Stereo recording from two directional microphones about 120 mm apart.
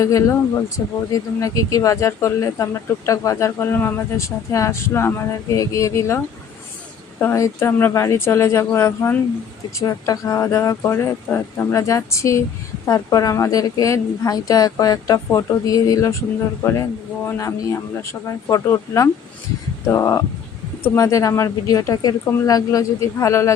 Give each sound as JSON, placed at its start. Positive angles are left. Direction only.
{"t": 0.0, "sound": "speech", "side_deg": 25}
{"t": 17.2, "sound": "speech", "side_deg": 25}